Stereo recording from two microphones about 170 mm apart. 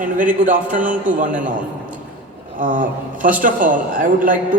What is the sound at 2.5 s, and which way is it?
A man's voice, 50° right (ahead or behind).